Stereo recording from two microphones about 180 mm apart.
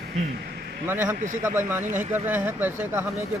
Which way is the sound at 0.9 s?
10° right (ahead or behind).